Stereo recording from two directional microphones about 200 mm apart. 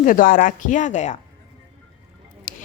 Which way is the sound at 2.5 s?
40° left (ahead or behind).